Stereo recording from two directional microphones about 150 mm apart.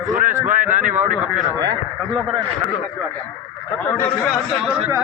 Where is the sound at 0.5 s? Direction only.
60° right (ahead or behind).